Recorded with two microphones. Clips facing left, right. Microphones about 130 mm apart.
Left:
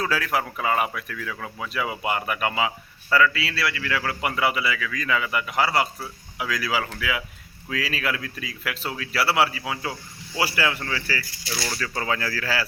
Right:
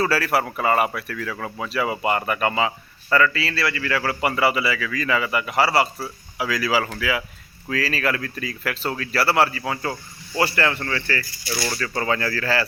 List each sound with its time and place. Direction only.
0.0 s speech: 5° right (ahead or behind)